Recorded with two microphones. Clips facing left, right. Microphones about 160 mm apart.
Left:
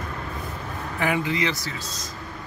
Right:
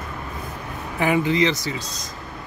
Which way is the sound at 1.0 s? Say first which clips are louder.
Right 5 dB; 25° right (ahead or behind).